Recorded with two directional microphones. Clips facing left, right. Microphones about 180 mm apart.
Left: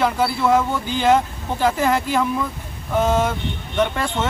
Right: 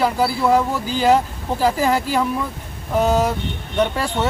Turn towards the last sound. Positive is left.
turn(degrees=-5)  # may be behind; listen again after turning